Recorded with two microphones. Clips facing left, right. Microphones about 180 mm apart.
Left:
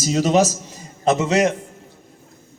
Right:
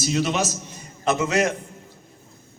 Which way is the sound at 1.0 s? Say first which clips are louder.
Left 4 dB; 25° left (ahead or behind).